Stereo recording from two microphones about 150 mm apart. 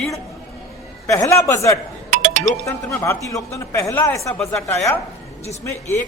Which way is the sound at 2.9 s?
20° left (ahead or behind).